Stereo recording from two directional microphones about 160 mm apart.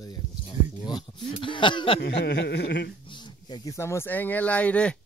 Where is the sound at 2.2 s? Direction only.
90° left.